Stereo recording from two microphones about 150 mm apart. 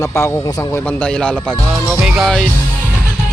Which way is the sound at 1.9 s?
5° right (ahead or behind).